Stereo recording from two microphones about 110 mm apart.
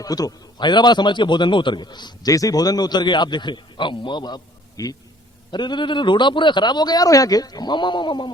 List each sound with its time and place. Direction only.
0.0 s a man's voice: 35° left (ahead or behind)
4.8 s a man's voice: 30° left (ahead or behind)
5.5 s a man's voice: 45° left (ahead or behind)